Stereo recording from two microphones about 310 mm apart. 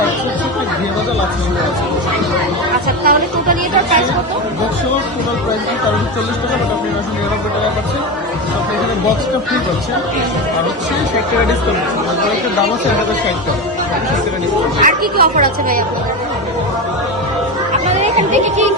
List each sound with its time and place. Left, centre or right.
3.0 s chatter: right
14.8 s a woman's voice: right
18.0 s speech: right